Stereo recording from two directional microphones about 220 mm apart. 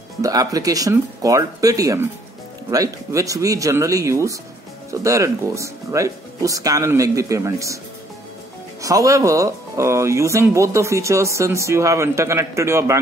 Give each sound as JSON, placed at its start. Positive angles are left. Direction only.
{"t": 0.2, "sound": "speech", "side_deg": -15}
{"t": 8.8, "sound": "speech", "side_deg": -15}